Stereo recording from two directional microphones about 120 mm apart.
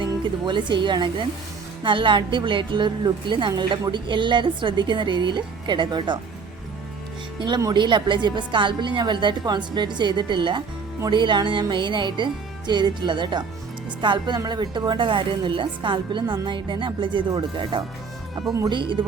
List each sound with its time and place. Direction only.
0.0 s a woman's voice: 40° right (ahead or behind)
7.3 s a woman's voice: 40° right (ahead or behind)